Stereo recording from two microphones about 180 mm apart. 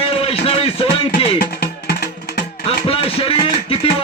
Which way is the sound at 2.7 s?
30° left (ahead or behind).